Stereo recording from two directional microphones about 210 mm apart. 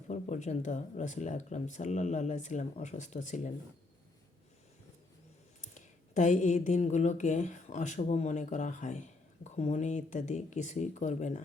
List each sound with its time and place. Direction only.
0.1 s speech: 35° left (ahead or behind)
5.7 s speech: 35° left (ahead or behind)